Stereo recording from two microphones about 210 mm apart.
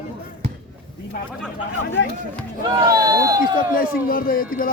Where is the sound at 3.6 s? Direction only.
45° left (ahead or behind).